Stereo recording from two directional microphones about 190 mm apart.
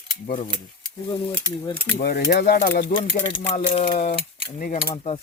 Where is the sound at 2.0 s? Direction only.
55° left (ahead or behind).